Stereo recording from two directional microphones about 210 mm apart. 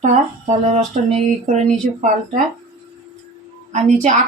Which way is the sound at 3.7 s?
35° right (ahead or behind).